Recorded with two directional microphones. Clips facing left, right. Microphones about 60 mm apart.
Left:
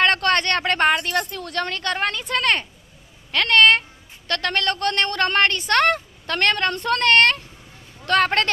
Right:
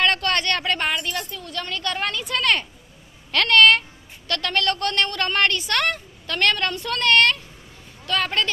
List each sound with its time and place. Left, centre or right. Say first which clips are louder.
0.0 s speech: left 3 dB; left
1.7 s a woman's voice: right 2 dB; left